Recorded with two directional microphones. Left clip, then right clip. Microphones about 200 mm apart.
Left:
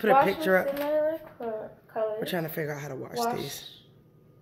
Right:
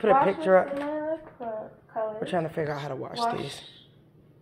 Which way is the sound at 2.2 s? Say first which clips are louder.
Right 3 dB; 15° left (ahead or behind).